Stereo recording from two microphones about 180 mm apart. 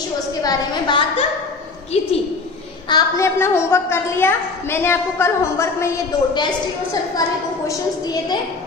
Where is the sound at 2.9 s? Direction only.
20° left (ahead or behind).